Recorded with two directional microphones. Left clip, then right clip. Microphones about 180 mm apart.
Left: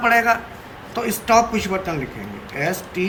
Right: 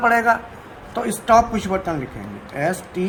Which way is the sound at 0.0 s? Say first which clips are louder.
Even; 40° right (ahead or behind).